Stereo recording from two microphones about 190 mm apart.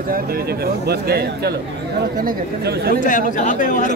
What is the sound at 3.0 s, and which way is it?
Speech, 45° left (ahead or behind).